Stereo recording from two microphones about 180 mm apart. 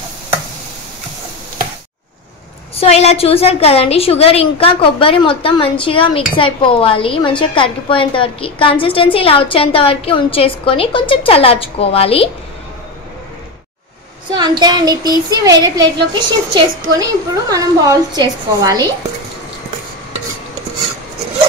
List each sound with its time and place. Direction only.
2.7 s a woman's voice: 35° left (ahead or behind)
14.3 s speech: 25° right (ahead or behind)